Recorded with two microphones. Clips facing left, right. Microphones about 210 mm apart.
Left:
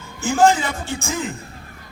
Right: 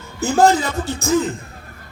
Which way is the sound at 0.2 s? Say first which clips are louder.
Right 2 dB; 40° right (ahead or behind).